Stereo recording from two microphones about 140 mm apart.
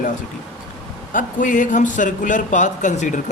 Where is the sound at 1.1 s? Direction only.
70° left (ahead or behind).